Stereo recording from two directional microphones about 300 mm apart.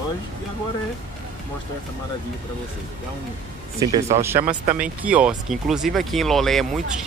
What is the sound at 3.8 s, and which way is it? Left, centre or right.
Speech, centre.